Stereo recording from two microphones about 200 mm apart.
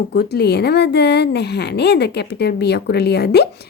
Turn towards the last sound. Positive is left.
turn(degrees=55)  # may be behind; listen again after turning